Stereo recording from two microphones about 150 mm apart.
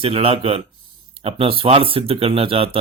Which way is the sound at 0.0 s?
40° right (ahead or behind).